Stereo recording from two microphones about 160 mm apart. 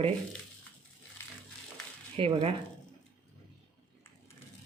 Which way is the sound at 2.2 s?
35° right (ahead or behind).